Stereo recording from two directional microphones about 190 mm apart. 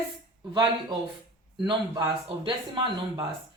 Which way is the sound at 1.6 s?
20° right (ahead or behind).